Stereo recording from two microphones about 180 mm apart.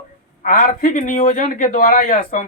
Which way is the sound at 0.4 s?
45° left (ahead or behind).